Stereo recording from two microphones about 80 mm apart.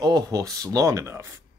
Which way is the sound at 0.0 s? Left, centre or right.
Right.